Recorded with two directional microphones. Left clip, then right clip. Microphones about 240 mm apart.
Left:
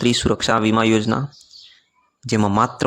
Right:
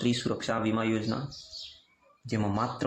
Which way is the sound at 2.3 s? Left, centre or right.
Left.